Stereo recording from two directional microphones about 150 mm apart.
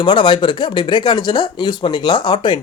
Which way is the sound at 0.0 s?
30° left (ahead or behind).